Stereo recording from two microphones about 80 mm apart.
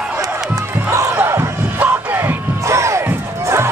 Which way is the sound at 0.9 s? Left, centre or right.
Right.